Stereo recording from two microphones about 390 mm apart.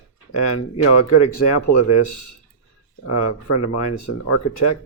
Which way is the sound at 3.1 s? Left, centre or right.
Left.